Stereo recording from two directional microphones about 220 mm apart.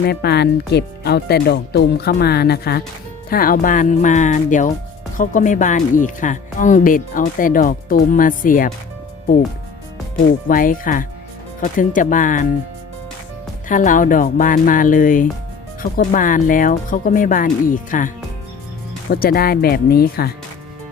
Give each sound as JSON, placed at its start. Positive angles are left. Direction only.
{"t": 0.0, "sound": "speech", "side_deg": 50}
{"t": 10.5, "sound": "speech", "side_deg": 40}
{"t": 13.7, "sound": "speech", "side_deg": 35}
{"t": 19.1, "sound": "speech", "side_deg": 45}